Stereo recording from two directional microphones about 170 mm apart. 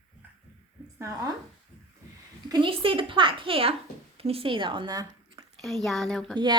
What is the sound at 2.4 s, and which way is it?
A child's voice, 25° right (ahead or behind).